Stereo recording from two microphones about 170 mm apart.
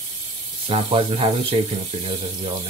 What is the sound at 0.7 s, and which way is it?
Speech, 35° right (ahead or behind).